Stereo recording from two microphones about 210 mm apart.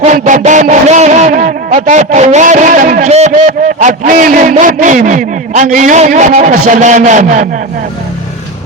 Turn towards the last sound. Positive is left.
turn(degrees=-35)  # may be behind; listen again after turning